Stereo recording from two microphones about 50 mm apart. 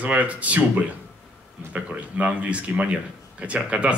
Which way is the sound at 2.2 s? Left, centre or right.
Right.